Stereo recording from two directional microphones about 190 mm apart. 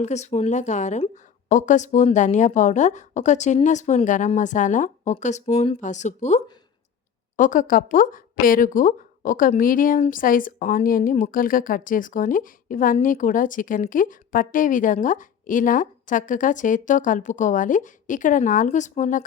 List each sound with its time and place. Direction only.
0.0 s speech: 35° left (ahead or behind)